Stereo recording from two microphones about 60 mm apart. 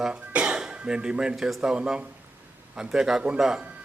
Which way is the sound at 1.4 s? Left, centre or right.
Centre.